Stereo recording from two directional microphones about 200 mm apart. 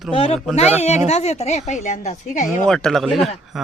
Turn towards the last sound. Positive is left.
turn(degrees=0)  # may be behind; listen again after turning